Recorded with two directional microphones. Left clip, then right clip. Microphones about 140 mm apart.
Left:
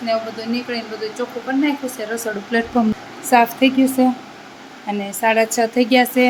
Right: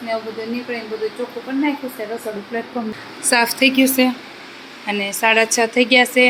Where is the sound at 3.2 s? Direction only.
5° left (ahead or behind).